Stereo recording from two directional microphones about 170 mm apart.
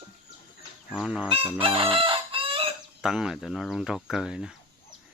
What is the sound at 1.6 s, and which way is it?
Chicken, 30° right (ahead or behind).